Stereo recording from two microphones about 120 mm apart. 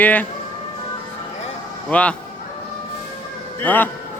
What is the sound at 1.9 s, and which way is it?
Speech, 10° left (ahead or behind).